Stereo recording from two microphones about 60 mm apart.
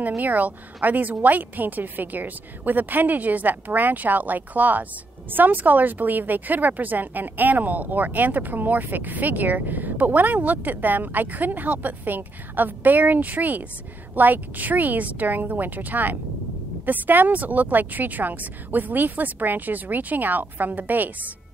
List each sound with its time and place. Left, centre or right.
0.2 s speech: right